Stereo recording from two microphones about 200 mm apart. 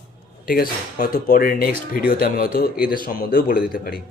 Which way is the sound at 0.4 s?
45° left (ahead or behind).